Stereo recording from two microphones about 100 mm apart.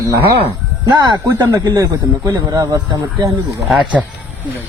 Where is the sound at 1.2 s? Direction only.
35° right (ahead or behind).